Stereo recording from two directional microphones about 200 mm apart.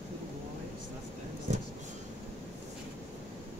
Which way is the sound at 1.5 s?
40° right (ahead or behind).